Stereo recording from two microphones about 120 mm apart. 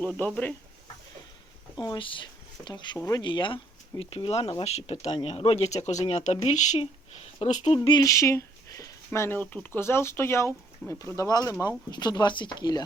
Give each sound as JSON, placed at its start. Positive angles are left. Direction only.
{"t": 0.0, "sound": "speech", "side_deg": 10}
{"t": 1.8, "sound": "speech", "side_deg": 40}
{"t": 8.0, "sound": "speech", "side_deg": 25}